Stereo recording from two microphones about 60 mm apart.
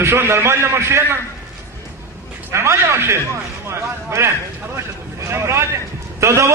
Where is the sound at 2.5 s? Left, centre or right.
Right.